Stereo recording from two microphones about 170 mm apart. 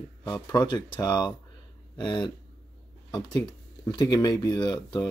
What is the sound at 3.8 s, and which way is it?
Speech, 20° left (ahead or behind).